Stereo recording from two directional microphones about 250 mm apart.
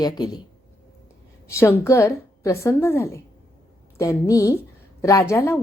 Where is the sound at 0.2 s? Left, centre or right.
Centre.